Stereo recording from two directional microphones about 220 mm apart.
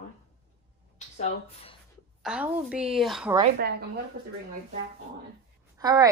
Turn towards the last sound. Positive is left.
turn(degrees=-15)  # may be behind; listen again after turning